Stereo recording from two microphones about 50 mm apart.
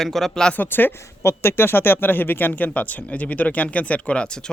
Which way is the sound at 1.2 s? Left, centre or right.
Left.